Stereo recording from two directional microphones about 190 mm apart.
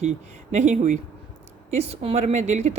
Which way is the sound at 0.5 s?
35° right (ahead or behind).